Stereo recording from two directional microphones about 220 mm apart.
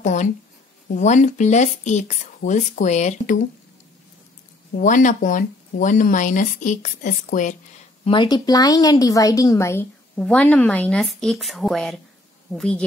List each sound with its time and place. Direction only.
0.0 s a sound: 35° left (ahead or behind)
0.8 s speech: 35° left (ahead or behind)
4.7 s speech: 35° left (ahead or behind)
8.0 s a woman's voice: 20° left (ahead or behind); by 12.8 s 5° left (ahead or behind)